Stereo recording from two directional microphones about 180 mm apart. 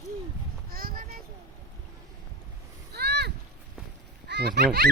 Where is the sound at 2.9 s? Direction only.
65° right (ahead or behind).